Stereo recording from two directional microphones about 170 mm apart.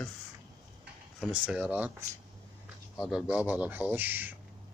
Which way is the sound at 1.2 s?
5° right (ahead or behind).